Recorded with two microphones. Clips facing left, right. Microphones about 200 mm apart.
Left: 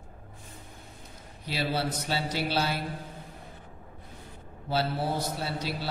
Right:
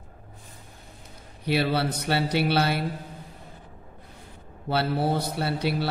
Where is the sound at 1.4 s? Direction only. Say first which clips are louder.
Right 6 dB; 65° right (ahead or behind).